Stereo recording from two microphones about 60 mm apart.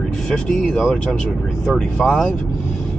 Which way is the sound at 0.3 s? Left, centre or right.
Centre.